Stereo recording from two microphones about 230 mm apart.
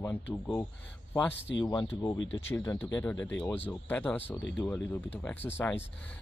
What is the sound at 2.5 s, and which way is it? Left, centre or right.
Speech, centre.